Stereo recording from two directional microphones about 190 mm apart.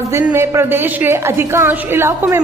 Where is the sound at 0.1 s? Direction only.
15° right (ahead or behind).